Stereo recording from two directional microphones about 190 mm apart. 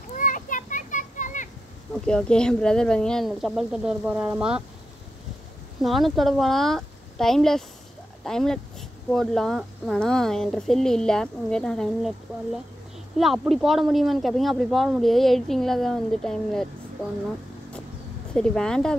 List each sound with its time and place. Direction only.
0.2 s children playing: 45° left (ahead or behind)
2.0 s speech: 5° left (ahead or behind)
5.8 s speech: centre (ahead or behind)
18.3 s speech: 5° left (ahead or behind)